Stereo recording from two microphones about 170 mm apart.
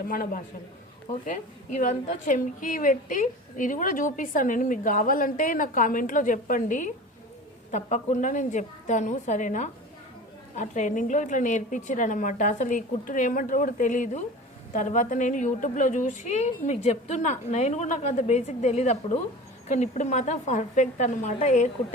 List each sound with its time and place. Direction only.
0.1 s a man's voice: 55° left (ahead or behind)